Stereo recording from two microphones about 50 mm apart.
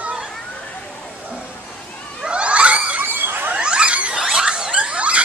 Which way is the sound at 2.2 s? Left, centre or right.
Right.